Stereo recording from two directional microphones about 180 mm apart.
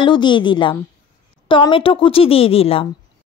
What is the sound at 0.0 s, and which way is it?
A woman's voice, 25° left (ahead or behind).